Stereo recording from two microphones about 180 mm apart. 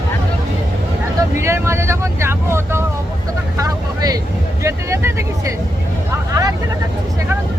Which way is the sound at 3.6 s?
20° right (ahead or behind).